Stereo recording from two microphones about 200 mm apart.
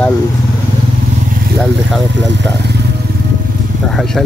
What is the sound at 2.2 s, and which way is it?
Speech, 60° right (ahead or behind).